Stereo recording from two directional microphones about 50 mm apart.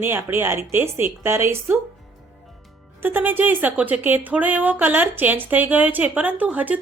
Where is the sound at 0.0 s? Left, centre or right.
Right.